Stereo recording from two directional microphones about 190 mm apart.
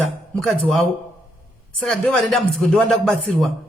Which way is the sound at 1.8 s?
5° left (ahead or behind).